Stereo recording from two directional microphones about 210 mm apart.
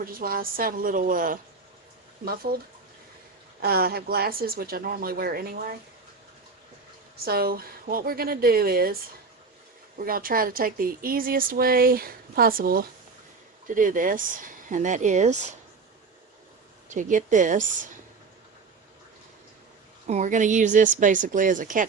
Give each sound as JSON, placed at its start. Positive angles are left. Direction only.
{"t": 0.0, "sound": "speech", "side_deg": -45}
{"t": 3.6, "sound": "speech", "side_deg": -45}
{"t": 7.3, "sound": "speech", "side_deg": -45}
{"t": 10.0, "sound": "speech", "side_deg": -45}
{"t": 16.9, "sound": "speech", "side_deg": -35}
{"t": 20.1, "sound": "speech", "side_deg": -35}